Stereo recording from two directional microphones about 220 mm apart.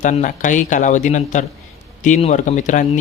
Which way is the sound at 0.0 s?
35° left (ahead or behind).